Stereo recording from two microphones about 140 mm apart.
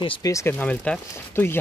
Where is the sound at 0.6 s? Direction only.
10° left (ahead or behind).